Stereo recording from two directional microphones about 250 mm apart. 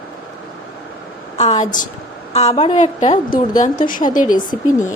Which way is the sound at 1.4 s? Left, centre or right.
Left.